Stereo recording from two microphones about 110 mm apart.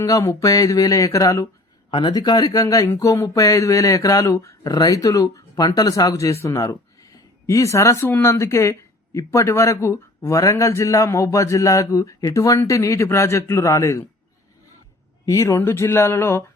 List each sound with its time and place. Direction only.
0.0 s speech: 30° left (ahead or behind)
1.9 s speech: 50° left (ahead or behind)
2.1 s a man's voice: 35° left (ahead or behind)
15.3 s a man's voice: 30° left (ahead or behind)